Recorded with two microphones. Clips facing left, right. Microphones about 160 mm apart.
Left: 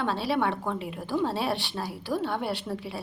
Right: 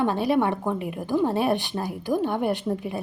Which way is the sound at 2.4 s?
50° right (ahead or behind).